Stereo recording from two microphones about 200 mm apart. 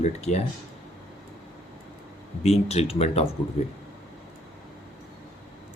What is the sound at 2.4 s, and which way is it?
Speech, 30° left (ahead or behind).